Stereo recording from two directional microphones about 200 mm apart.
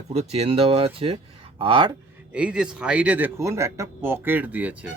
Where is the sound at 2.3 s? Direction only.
5° right (ahead or behind).